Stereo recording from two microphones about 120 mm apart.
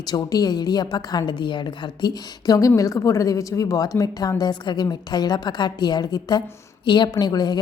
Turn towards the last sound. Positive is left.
turn(degrees=35)  # may be behind; listen again after turning